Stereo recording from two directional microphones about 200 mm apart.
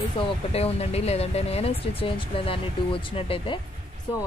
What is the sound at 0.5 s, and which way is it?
Speech, 30° left (ahead or behind).